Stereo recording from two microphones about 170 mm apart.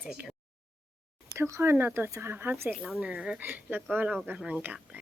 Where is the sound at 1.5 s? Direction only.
15° right (ahead or behind).